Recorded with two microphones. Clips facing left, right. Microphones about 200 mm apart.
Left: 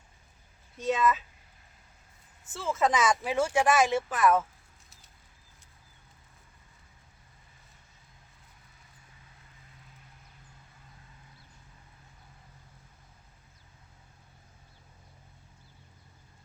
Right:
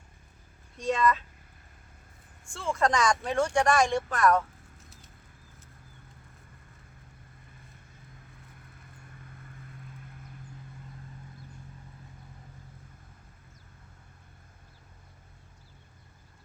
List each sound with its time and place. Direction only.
0.8 s speech: 5° left (ahead or behind)
2.4 s speech: 5° left (ahead or behind)
9.1 s vehicle: 55° right (ahead or behind)